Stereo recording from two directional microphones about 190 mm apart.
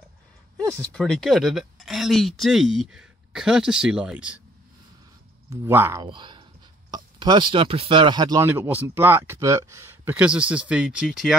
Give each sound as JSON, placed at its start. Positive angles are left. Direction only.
{"t": 0.7, "sound": "speech", "side_deg": 5}
{"t": 5.5, "sound": "speech", "side_deg": -10}
{"t": 6.0, "sound": "speech", "side_deg": -25}